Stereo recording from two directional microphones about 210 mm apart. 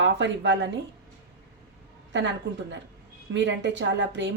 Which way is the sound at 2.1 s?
60° right (ahead or behind).